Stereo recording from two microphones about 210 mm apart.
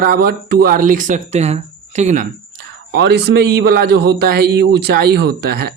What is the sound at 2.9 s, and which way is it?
A man's voice, 50° right (ahead or behind).